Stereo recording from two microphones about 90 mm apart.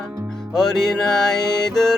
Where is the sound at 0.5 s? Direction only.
5° left (ahead or behind).